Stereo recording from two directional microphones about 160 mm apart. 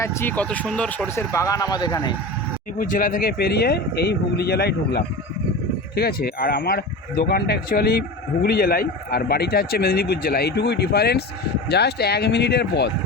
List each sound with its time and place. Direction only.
0.0 s speech: 15° left (ahead or behind)
2.7 s speech: 55° left (ahead or behind); by 12.9 s 90° left